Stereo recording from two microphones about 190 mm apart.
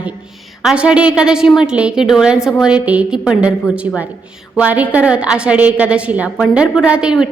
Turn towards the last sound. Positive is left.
turn(degrees=-5)  # may be behind; listen again after turning